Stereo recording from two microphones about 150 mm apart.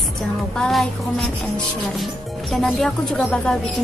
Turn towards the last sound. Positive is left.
turn(degrees=5)  # may be behind; listen again after turning